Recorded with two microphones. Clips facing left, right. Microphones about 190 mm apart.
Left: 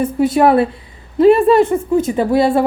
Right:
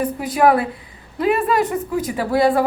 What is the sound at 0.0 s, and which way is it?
Speech, 25° left (ahead or behind).